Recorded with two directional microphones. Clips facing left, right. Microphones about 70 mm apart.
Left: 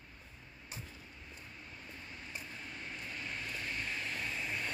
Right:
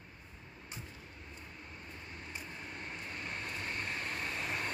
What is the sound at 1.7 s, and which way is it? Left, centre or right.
Vehicle, right.